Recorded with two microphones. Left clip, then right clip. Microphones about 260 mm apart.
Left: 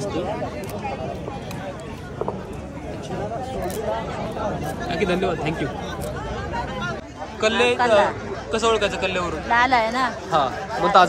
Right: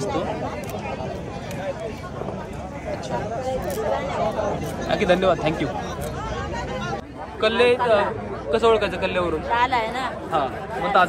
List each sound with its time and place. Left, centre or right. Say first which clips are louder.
4.8 s speech: right 4 dB; centre
7.3 s speech: right 1 dB; centre
9.5 s speech: left 5 dB; left